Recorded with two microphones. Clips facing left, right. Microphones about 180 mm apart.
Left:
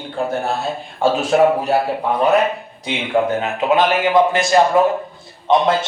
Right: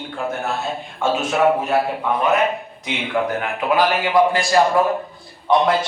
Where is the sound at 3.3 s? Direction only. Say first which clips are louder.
Left 3 dB; 25° left (ahead or behind).